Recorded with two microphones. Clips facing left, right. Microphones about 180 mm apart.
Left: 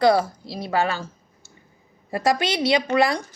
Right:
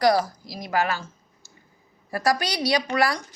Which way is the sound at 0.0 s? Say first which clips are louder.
Left 2 dB; 25° left (ahead or behind).